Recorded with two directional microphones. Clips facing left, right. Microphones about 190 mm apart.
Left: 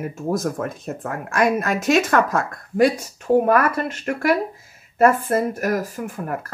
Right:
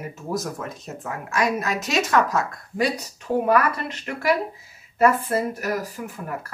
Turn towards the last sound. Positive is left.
turn(degrees=50)  # may be behind; listen again after turning